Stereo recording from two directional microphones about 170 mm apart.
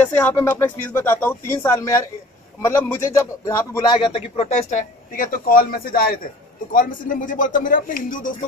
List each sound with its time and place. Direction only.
0.0 s a man's voice: 10° left (ahead or behind); by 8.3 s 55° left (ahead or behind)